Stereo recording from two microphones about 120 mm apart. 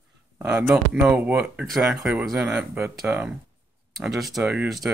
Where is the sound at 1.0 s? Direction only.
10° right (ahead or behind).